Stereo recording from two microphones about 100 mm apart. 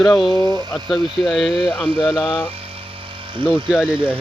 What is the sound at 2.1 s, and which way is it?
Speech, 15° left (ahead or behind).